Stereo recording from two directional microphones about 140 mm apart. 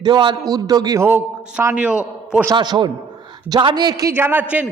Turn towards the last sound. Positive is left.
turn(degrees=-10)  # may be behind; listen again after turning